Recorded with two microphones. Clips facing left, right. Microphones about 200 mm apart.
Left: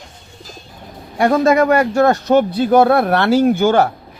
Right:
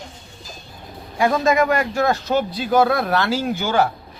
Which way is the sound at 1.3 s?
45° left (ahead or behind).